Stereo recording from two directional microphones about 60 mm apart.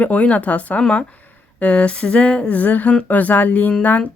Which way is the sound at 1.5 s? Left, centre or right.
Left.